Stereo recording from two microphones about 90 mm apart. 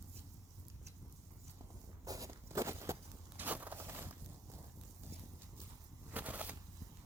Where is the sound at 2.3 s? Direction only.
30° right (ahead or behind).